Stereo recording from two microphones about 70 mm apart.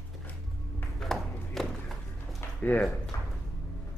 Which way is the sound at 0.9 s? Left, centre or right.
Centre.